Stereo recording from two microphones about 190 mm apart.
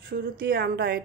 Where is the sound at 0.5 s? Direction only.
55° right (ahead or behind).